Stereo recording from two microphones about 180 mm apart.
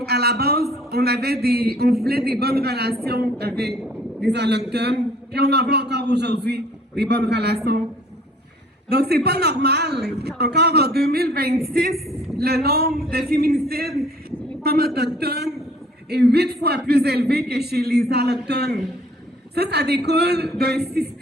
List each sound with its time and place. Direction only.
0.0 s a man's voice: 60° right (ahead or behind)
8.9 s a man's voice: 60° right (ahead or behind)